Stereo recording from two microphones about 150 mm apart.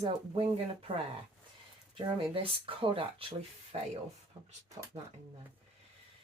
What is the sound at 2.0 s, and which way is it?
Speech, 35° right (ahead or behind).